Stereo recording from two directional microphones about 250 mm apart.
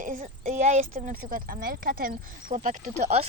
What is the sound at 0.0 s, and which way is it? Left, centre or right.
Speech, right.